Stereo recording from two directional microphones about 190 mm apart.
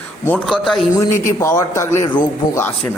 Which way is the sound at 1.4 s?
15° left (ahead or behind).